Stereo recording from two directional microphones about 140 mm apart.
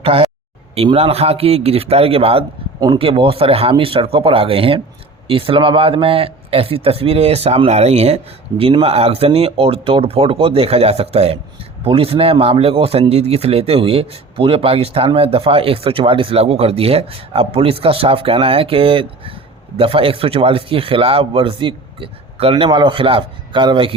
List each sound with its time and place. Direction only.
0.0 s speech: 40° right (ahead or behind)